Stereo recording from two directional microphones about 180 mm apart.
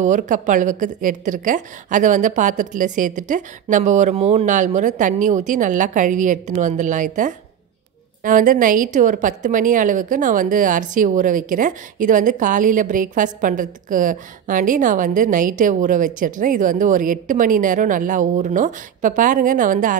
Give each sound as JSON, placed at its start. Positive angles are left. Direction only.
{"t": 0.0, "sound": "a woman's voice", "side_deg": -45}